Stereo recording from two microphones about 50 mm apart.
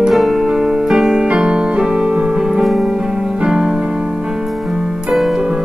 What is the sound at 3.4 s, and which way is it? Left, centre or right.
Music, centre.